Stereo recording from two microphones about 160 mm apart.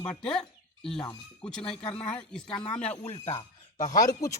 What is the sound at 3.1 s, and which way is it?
Speech, 40° left (ahead or behind).